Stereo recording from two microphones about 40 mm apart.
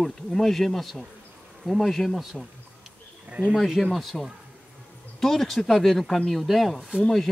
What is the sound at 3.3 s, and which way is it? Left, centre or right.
Speech, right.